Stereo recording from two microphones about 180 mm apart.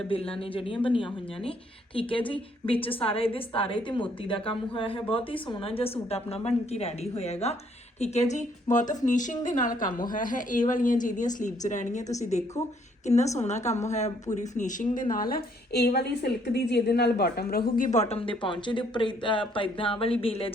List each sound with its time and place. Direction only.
0.1 s a woman's voice: 30° left (ahead or behind)